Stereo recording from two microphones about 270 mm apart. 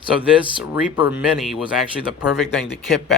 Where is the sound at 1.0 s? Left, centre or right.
Centre.